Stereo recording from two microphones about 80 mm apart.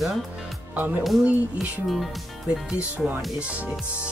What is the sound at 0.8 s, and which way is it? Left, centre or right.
Speech, right.